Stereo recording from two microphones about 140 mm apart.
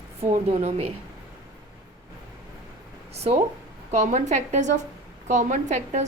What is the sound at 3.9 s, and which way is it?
A woman's voice, 55° right (ahead or behind).